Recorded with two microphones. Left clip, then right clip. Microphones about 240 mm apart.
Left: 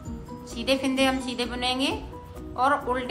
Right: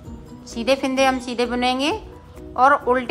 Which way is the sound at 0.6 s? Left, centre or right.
Right.